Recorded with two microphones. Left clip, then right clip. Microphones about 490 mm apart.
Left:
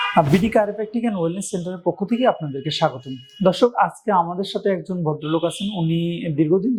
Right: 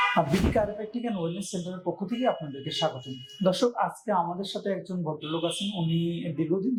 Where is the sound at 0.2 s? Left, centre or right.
Left.